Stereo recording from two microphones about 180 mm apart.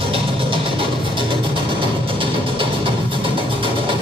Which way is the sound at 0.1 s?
30° right (ahead or behind).